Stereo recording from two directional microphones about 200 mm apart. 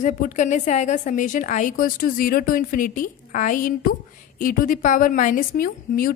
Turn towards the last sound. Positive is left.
turn(degrees=45)  # may be behind; listen again after turning